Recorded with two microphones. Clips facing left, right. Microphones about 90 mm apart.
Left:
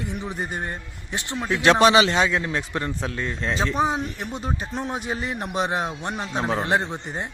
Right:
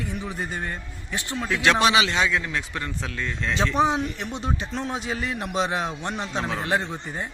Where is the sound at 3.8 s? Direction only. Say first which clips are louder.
Right 1 dB; centre (ahead or behind).